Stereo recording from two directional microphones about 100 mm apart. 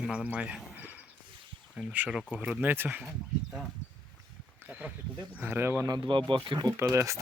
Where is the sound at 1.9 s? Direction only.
15° right (ahead or behind).